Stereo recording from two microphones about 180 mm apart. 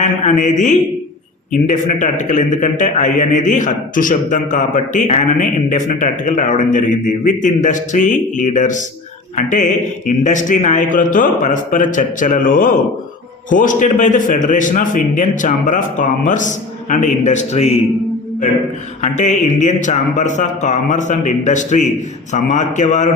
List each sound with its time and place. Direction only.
0.5 s a man's voice: 40° left (ahead or behind)
19.0 s a man's voice: 40° left (ahead or behind)